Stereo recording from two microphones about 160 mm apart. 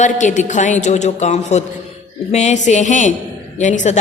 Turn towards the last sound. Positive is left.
turn(degrees=50)  # may be behind; listen again after turning